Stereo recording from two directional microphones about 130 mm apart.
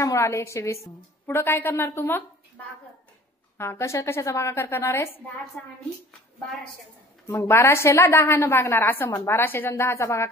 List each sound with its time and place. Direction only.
0.0 s a woman's voice: 25° left (ahead or behind)
3.5 s a woman's voice: 20° left (ahead or behind)
7.2 s a woman's voice: 20° left (ahead or behind)